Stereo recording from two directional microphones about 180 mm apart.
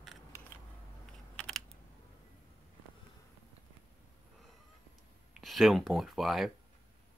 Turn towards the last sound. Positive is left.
turn(degrees=0)  # may be behind; listen again after turning